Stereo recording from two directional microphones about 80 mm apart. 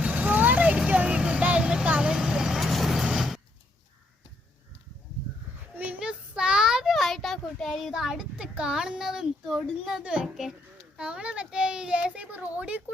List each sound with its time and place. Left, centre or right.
0.0 s vehicle: right; by 3.4 s centre
5.7 s a sound: right
6.0 s child singing: centre
10.0 s a child's voice: centre